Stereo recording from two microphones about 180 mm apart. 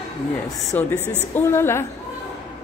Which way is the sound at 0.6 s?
10° left (ahead or behind).